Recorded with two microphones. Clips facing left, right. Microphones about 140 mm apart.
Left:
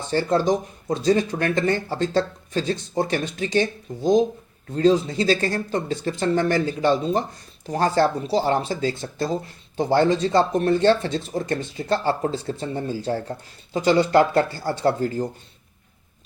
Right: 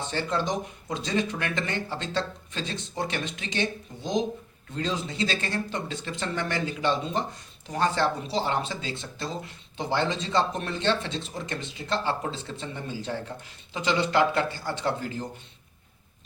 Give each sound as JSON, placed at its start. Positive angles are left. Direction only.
{"t": 0.1, "sound": "speech", "side_deg": 40}